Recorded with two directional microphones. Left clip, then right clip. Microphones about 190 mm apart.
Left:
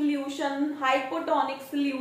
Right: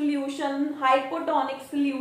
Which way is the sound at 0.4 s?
30° right (ahead or behind).